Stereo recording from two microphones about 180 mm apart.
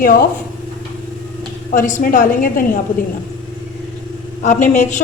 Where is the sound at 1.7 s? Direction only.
50° left (ahead or behind).